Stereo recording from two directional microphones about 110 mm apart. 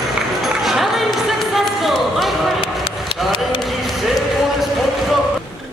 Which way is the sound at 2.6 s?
55° left (ahead or behind).